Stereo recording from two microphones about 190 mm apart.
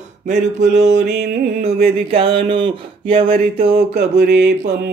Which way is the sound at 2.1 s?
30° right (ahead or behind).